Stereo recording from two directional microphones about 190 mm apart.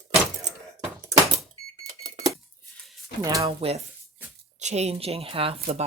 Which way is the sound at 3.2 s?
15° right (ahead or behind).